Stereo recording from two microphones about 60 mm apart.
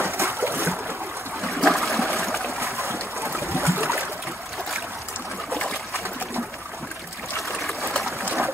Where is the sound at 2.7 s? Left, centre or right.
Right.